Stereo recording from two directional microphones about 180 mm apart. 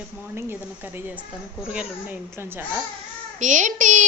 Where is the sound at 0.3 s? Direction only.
10° right (ahead or behind).